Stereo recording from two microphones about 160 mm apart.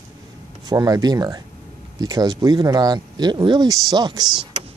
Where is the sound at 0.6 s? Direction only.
25° right (ahead or behind).